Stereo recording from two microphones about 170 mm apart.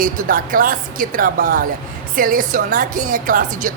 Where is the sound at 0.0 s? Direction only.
55° right (ahead or behind).